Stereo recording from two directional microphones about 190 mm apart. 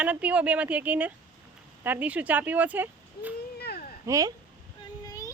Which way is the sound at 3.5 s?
55° left (ahead or behind).